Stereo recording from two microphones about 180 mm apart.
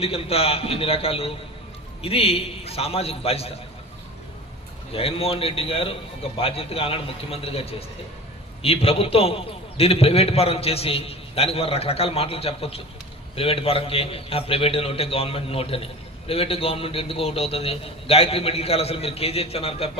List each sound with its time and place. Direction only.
0.0 s a man's voice: 35° left (ahead or behind)
4.9 s a man's voice: 30° left (ahead or behind)